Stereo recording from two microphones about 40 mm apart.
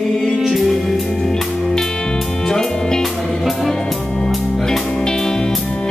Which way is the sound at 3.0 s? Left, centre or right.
Centre.